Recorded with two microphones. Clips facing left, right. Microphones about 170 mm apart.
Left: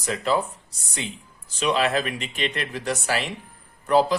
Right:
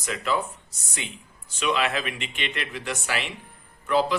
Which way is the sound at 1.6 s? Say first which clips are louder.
Left 3 dB; 35° left (ahead or behind).